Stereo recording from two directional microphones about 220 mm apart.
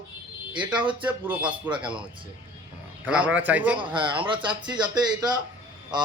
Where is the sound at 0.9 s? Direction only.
20° right (ahead or behind).